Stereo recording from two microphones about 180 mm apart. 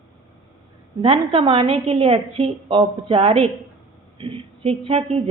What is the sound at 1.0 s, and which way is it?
A woman's voice, 30° right (ahead or behind).